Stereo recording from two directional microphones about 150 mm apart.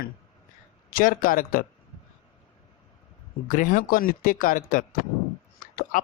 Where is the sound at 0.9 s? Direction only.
70° left (ahead or behind).